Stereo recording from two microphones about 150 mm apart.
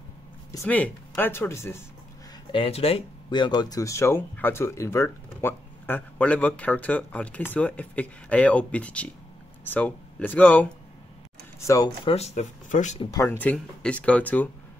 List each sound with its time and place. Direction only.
0.7 s speech: 10° left (ahead or behind)
2.5 s speech: 40° left (ahead or behind); by 10.7 s 10° left (ahead or behind)
11.6 s speech: 20° left (ahead or behind)
12.0 s speech: 40° left (ahead or behind)
13.1 s speech: 20° left (ahead or behind)